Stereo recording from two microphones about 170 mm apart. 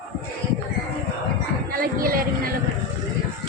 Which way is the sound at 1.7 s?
55° right (ahead or behind).